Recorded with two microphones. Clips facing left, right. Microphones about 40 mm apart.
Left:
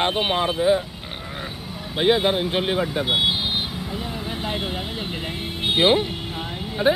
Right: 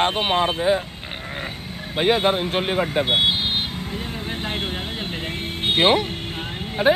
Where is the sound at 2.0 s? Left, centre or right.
Right.